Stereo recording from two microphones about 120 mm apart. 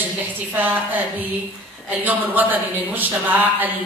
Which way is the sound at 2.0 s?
15° right (ahead or behind).